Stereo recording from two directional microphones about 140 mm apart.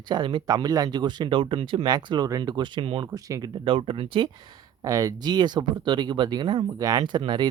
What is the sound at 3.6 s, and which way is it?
Speech, 40° right (ahead or behind).